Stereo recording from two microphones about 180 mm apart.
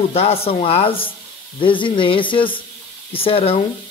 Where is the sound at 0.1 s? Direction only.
35° left (ahead or behind).